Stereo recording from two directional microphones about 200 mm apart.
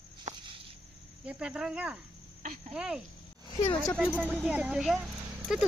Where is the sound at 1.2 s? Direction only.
5° right (ahead or behind).